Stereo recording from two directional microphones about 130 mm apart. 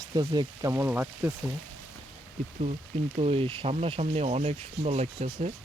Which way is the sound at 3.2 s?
45° right (ahead or behind).